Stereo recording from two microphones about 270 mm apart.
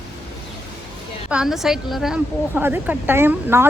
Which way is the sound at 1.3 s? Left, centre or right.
Centre.